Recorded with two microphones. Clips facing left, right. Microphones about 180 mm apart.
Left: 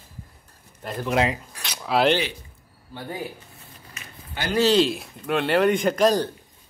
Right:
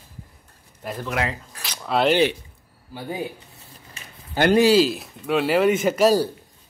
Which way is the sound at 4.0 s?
30° right (ahead or behind).